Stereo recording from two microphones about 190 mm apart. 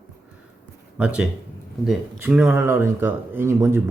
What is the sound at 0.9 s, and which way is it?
Speech, 5° right (ahead or behind).